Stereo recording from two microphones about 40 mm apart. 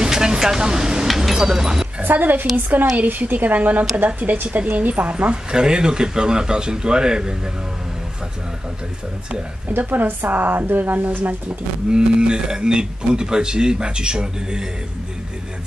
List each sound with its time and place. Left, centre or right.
0.0 s a sound: centre
1.0 s a sound: centre
2.0 s a woman's voice: right
5.5 s speech: right
9.7 s a woman's voice: right
10.2 s a woman's voice: right
11.9 s speech: right